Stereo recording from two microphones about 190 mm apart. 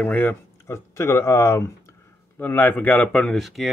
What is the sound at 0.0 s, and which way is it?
Speech, 10° left (ahead or behind).